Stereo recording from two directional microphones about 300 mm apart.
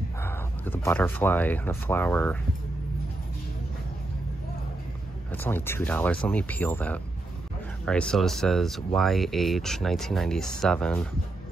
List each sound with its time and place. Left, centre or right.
0.2 s speech: centre
5.3 s speech: centre